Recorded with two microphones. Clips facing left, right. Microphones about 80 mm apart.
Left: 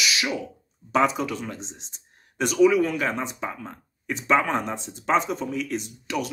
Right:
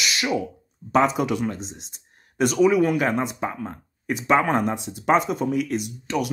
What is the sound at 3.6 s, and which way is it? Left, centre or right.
Speech, centre.